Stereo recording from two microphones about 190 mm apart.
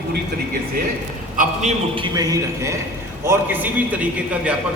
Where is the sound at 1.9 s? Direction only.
25° right (ahead or behind); by 4.6 s 5° right (ahead or behind).